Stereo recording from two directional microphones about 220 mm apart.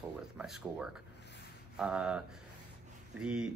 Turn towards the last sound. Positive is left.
turn(degrees=-5)  # may be behind; listen again after turning